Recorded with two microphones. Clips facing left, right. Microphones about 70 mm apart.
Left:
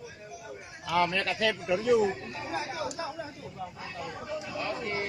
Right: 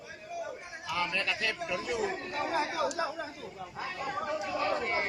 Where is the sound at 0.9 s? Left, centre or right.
Left.